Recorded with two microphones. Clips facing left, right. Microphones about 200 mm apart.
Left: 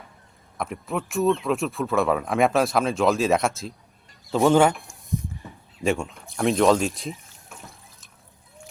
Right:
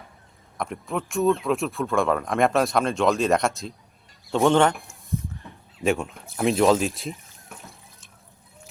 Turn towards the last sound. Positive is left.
turn(degrees=0)  # may be behind; listen again after turning